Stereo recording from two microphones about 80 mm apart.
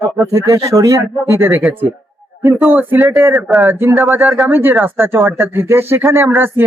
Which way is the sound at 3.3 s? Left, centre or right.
Centre.